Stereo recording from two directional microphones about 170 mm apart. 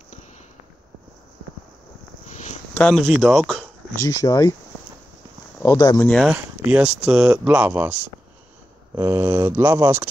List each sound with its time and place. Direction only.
2.2 s a sound: 45° left (ahead or behind)
2.7 s speech: 5° left (ahead or behind)
4.0 s speech: 20° left (ahead or behind)
5.6 s speech: 15° left (ahead or behind)
6.0 s speech: 5° left (ahead or behind)
6.3 s speech: 5° right (ahead or behind)